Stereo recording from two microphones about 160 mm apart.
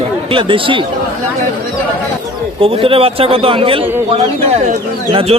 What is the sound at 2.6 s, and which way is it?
Speech, 35° right (ahead or behind).